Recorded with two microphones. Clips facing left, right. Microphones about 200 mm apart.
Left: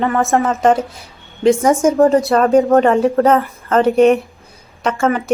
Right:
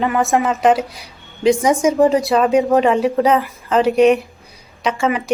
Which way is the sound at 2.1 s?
Centre (ahead or behind).